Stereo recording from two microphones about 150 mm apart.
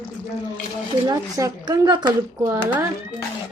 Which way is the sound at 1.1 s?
25° right (ahead or behind).